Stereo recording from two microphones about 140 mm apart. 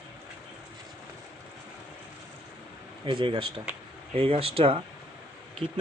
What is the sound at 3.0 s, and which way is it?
Speech, 35° right (ahead or behind).